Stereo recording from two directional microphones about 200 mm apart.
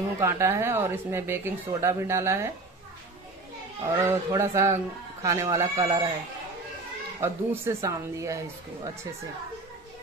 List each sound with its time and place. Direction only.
0.2 s a woman's voice: 15° right (ahead or behind)
3.9 s a woman's voice: 15° right (ahead or behind)
7.2 s a woman's voice: 15° right (ahead or behind)